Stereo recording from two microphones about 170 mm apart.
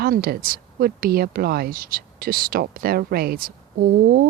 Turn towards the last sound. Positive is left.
turn(degrees=-65)  # may be behind; listen again after turning